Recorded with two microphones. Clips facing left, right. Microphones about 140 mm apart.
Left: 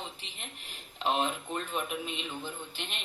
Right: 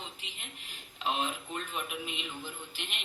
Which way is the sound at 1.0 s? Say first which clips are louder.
Left 3 dB; 40° left (ahead or behind).